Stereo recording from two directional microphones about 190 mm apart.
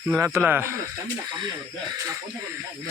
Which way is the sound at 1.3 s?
25° right (ahead or behind).